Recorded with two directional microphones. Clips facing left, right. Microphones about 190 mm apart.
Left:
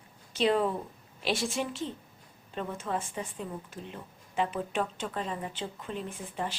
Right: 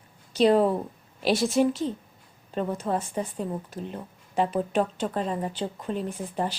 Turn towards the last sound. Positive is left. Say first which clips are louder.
# right 6 dB
turn(degrees=-40)  # may be behind; listen again after turning